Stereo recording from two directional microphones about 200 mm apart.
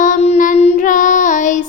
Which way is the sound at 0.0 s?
35° left (ahead or behind).